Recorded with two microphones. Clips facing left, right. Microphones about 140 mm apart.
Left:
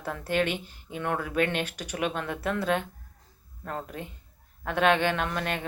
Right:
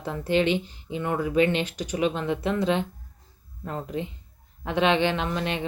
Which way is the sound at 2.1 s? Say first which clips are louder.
Right 4 dB; 15° right (ahead or behind).